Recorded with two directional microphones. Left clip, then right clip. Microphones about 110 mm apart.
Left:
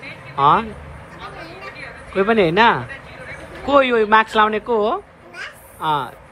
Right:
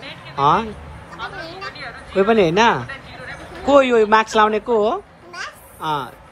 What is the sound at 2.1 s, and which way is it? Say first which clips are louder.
Speech: even; 35° right (ahead or behind).